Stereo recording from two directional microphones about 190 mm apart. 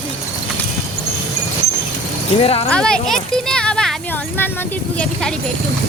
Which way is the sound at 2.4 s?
30° left (ahead or behind).